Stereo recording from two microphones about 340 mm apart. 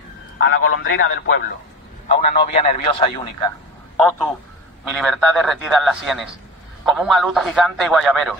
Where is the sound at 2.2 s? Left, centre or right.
Centre.